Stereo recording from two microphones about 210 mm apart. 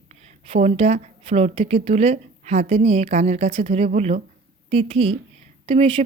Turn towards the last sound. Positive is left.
turn(degrees=-25)  # may be behind; listen again after turning